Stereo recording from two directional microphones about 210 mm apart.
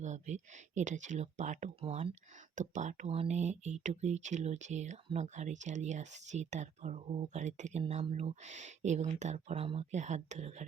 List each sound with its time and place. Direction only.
0.0 s speech: 35° right (ahead or behind)